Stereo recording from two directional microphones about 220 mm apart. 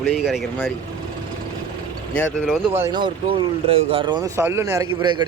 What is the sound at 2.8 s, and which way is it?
Speech, 20° right (ahead or behind).